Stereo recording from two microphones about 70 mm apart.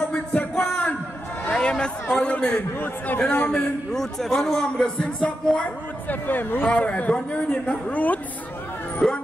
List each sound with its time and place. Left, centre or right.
0.1 s music: left
1.4 s a man's voice: centre
3.5 s a man's voice: centre
9.0 s speech: centre